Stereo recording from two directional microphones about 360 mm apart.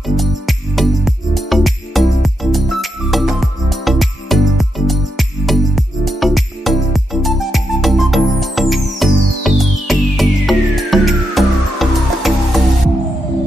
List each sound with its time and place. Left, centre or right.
0.0 s music: centre